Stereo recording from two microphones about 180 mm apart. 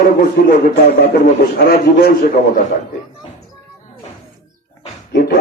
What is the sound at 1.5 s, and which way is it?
Speech, 60° left (ahead or behind).